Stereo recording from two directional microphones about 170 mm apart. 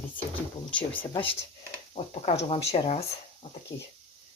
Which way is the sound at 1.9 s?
35° left (ahead or behind).